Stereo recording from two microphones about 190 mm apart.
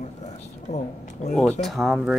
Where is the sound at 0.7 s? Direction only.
35° left (ahead or behind).